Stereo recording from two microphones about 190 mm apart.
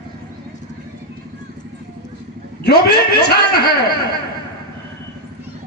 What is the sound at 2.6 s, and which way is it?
Speech, 60° left (ahead or behind).